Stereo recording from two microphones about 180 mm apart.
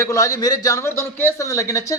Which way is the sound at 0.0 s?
20° left (ahead or behind).